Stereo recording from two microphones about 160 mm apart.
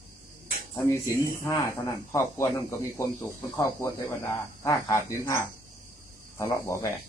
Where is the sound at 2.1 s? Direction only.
15° left (ahead or behind).